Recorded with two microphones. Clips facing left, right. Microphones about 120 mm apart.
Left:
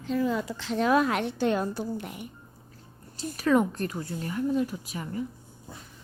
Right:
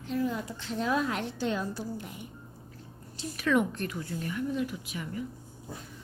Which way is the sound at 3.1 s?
35° left (ahead or behind).